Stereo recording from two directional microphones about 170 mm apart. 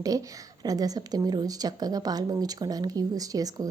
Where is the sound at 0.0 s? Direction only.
20° right (ahead or behind).